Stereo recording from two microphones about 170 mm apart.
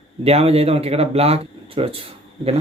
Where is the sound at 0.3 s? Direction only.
35° right (ahead or behind).